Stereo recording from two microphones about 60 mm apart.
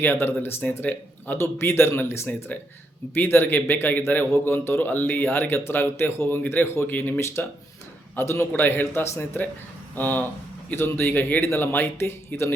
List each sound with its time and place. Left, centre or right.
0.0 s a man's voice: left
0.6 s speech: left
1.4 s a man's voice: left
4.3 s a man's voice: left
6.2 s a man's voice: left
7.2 s a man's voice: left